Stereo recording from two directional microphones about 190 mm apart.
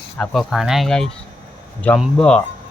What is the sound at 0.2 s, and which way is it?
Speech, centre (ahead or behind).